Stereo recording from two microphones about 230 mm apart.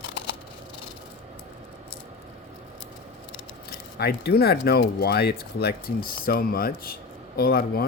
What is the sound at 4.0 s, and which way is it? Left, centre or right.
Speech, left.